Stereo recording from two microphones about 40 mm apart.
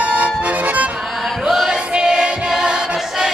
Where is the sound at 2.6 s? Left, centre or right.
Right.